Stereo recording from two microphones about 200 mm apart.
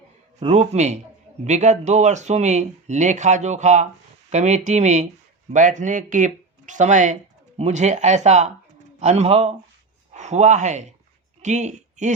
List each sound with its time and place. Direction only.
0.4 s speech: 35° right (ahead or behind)